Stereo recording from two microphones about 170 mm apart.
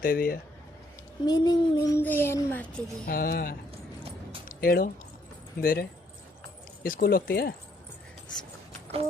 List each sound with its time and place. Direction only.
0.0 s speech: 55° left (ahead or behind)
1.2 s speech: 25° left (ahead or behind)
3.1 s speech: 60° left (ahead or behind)
4.4 s a sound: 60° left (ahead or behind)
5.5 s speech: 65° left (ahead or behind)